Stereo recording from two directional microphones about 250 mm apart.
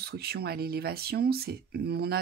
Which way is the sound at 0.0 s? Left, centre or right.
Right.